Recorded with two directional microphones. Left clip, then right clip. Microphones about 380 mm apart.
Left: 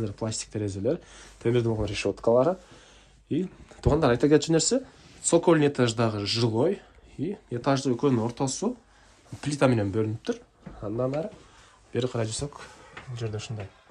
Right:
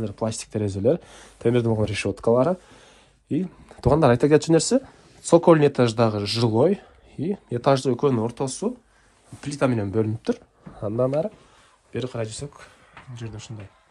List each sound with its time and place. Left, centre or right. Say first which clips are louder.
0.0 s speech: right 4 dB; centre
11.9 s speech: even; centre